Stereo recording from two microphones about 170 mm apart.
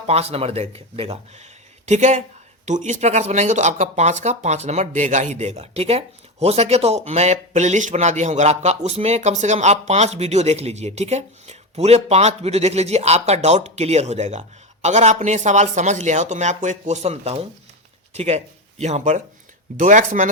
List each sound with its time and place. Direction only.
0.1 s speech: 35° right (ahead or behind)